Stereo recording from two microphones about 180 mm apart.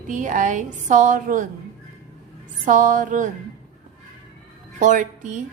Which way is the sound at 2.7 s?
45° right (ahead or behind).